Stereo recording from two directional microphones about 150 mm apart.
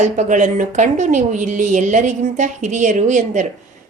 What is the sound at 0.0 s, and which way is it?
Speech, 55° right (ahead or behind).